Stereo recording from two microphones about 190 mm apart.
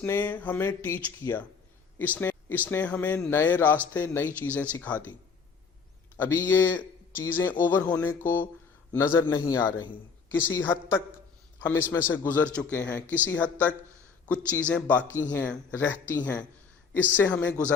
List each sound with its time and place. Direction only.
0.0 s speech: 10° left (ahead or behind)
6.1 s a man's voice: 10° left (ahead or behind)